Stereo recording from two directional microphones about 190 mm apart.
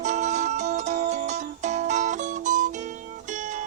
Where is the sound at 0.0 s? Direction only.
40° right (ahead or behind).